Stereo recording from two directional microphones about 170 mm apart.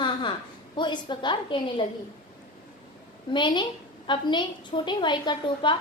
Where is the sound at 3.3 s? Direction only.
30° left (ahead or behind).